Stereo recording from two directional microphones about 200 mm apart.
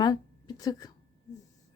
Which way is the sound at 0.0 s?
20° left (ahead or behind).